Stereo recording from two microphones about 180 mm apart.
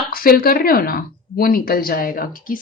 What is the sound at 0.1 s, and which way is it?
Speech, 55° left (ahead or behind).